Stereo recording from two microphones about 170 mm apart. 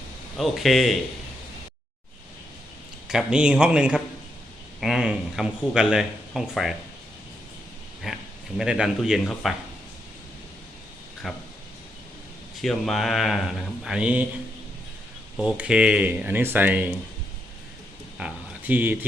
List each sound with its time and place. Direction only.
0.3 s speech: centre (ahead or behind)
3.1 s speech: 5° right (ahead or behind)
8.0 s speech: centre (ahead or behind)
11.2 s speech: centre (ahead or behind)
12.6 s speech: centre (ahead or behind)
15.4 s speech: 5° right (ahead or behind)
18.2 s speech: 5° right (ahead or behind)